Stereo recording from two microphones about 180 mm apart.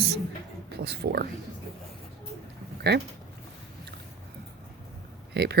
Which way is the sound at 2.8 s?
65° right (ahead or behind).